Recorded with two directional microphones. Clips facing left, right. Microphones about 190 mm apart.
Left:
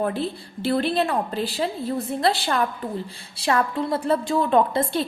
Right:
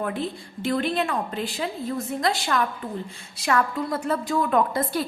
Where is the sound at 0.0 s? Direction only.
35° left (ahead or behind).